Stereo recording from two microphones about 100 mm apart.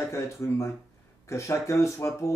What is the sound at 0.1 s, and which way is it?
Speech, 30° left (ahead or behind).